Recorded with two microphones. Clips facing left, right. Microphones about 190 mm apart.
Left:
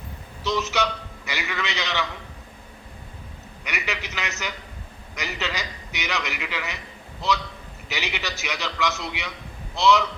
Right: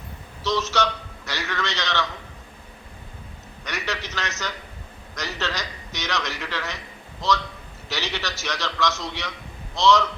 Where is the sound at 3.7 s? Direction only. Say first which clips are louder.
Right 1 dB; 15° left (ahead or behind).